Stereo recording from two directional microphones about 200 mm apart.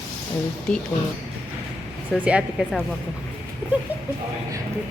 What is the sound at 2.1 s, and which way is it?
Speech, centre (ahead or behind).